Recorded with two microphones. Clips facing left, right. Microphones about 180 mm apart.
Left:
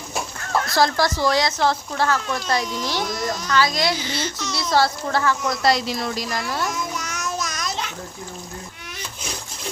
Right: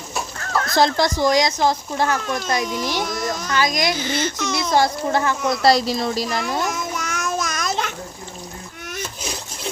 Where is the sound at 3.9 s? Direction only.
50° right (ahead or behind).